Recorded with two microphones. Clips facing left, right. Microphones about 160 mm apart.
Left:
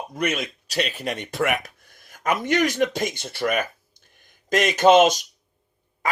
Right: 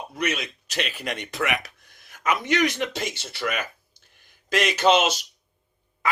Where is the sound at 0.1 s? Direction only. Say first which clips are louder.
Left 2 dB; 50° left (ahead or behind).